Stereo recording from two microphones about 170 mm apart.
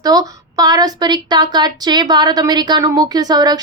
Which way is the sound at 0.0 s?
20° right (ahead or behind).